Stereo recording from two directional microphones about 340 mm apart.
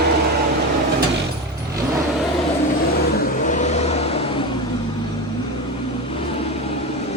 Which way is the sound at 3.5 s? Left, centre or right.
Left.